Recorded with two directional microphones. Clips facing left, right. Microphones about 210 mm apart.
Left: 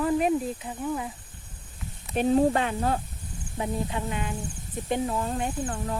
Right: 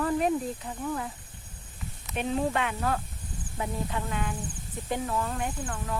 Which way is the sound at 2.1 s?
35° left (ahead or behind).